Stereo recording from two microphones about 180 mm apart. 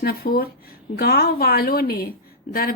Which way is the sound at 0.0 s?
55° left (ahead or behind).